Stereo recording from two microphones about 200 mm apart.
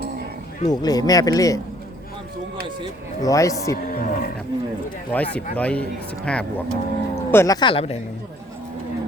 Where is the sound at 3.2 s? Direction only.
15° left (ahead or behind).